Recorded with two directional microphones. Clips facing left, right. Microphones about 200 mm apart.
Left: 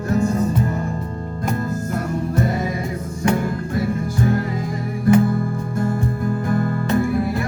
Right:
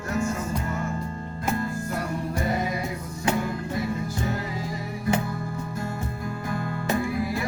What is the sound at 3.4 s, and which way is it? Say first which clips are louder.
Music: left 5 dB; 50° left (ahead or behind).